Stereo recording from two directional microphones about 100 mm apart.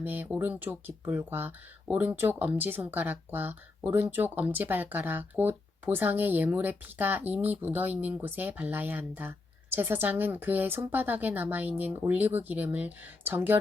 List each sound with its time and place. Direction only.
0.0 s speech: 20° right (ahead or behind)